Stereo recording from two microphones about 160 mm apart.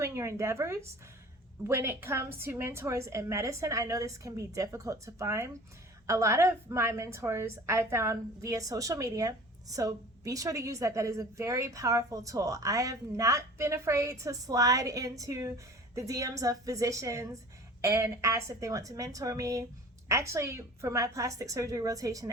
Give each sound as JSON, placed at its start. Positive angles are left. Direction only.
{"t": 0.0, "sound": "a woman's voice", "side_deg": -20}